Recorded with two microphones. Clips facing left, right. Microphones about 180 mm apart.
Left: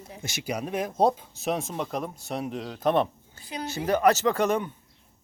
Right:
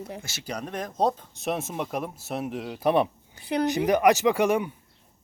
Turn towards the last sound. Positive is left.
turn(degrees=-10)  # may be behind; listen again after turning